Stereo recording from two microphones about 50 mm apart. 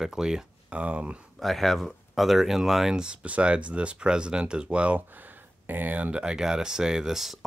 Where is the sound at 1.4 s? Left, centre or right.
Centre; by 5.0 s right.